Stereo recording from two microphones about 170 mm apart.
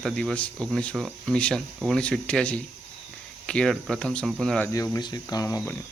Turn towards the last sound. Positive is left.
turn(degrees=15)  # may be behind; listen again after turning